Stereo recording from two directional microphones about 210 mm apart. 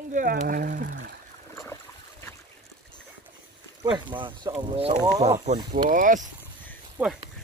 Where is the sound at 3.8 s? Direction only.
25° right (ahead or behind); by 6.2 s 40° right (ahead or behind).